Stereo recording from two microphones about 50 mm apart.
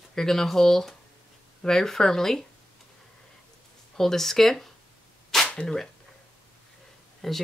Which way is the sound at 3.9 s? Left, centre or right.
Centre.